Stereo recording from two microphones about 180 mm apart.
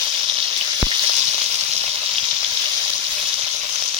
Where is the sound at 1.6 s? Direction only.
10° right (ahead or behind).